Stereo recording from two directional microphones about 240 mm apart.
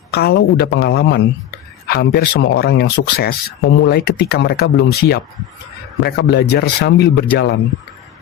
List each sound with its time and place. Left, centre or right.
0.1 s speech: left